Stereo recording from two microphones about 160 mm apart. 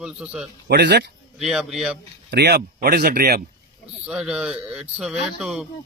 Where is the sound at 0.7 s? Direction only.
90° right.